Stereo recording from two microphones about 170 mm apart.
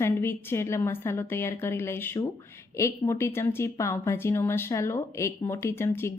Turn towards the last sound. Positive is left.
turn(degrees=15)  # may be behind; listen again after turning